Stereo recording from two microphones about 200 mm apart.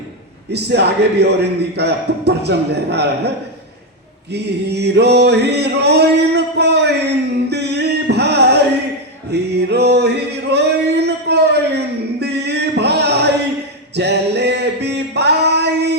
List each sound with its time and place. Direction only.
0.5 s male singing: 55° right (ahead or behind)
7.5 s music: 55° right (ahead or behind)
13.9 s a sound: 55° right (ahead or behind)